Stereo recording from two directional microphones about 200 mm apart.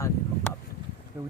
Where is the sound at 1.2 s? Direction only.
10° right (ahead or behind).